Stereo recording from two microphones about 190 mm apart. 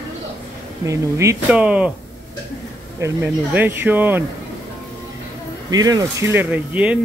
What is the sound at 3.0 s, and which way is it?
Speech, 10° right (ahead or behind).